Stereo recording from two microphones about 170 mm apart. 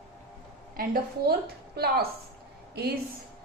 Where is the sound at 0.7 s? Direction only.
60° right (ahead or behind).